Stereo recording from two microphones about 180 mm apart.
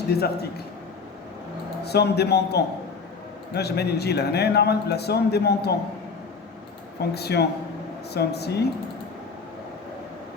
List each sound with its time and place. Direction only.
1.8 s a man's voice: 65° left (ahead or behind)
7.0 s a man's voice: 65° left (ahead or behind)